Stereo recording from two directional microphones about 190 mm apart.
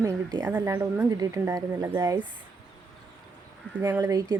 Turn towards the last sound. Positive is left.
turn(degrees=-20)  # may be behind; listen again after turning